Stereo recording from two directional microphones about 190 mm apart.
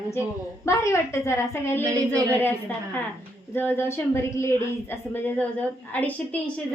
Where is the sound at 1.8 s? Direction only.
15° right (ahead or behind).